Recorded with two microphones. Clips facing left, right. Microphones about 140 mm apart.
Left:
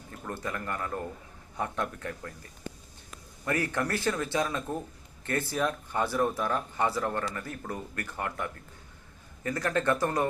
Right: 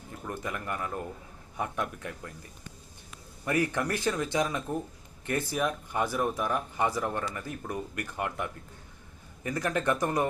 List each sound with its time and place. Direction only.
0.3 s speech: 15° right (ahead or behind)
3.4 s speech: 15° right (ahead or behind)